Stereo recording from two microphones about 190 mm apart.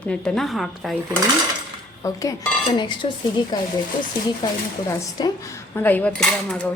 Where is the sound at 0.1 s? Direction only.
5° left (ahead or behind).